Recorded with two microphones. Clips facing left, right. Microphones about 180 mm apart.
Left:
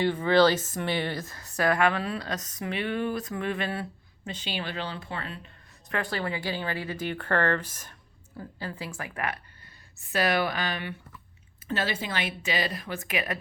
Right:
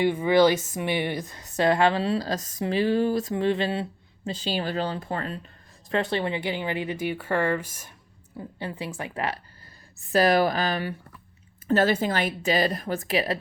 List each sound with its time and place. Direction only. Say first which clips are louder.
0.0 s speech: right 2 dB; 10° right (ahead or behind); by 5.4 s 40° right (ahead or behind)
5.9 s speech: right 5 dB; 25° right (ahead or behind)
10.1 s speech: right 6 dB; 35° right (ahead or behind)